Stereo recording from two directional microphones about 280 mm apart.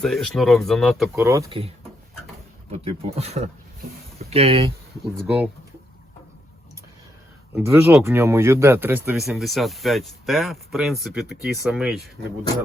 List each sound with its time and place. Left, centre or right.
0.0 s speech: centre
2.7 s speech: right
5.1 s speech: centre
7.5 s speech: centre